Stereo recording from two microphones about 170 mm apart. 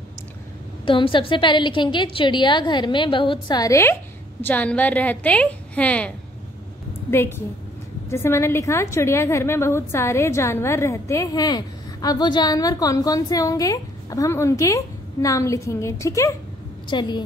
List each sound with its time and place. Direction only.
0.8 s a woman's voice: 30° left (ahead or behind)